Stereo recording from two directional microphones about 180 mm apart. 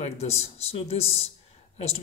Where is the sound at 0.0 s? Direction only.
35° left (ahead or behind).